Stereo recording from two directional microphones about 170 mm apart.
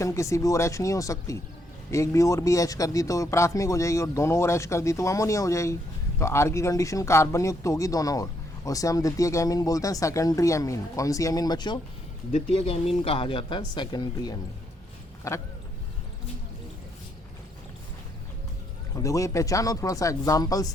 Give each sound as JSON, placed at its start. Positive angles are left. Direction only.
{"t": 0.0, "sound": "speech", "side_deg": 20}
{"t": 12.3, "sound": "speech", "side_deg": 35}
{"t": 18.9, "sound": "speech", "side_deg": 20}